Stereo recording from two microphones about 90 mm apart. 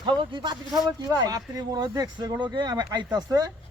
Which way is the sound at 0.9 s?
45° right (ahead or behind).